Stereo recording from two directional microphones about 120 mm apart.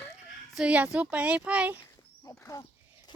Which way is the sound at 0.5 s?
10° right (ahead or behind).